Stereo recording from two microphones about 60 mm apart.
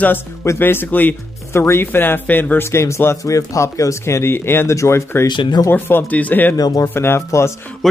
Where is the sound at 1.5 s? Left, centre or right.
Left.